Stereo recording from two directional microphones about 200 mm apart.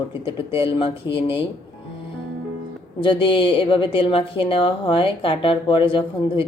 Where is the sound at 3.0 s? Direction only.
25° left (ahead or behind).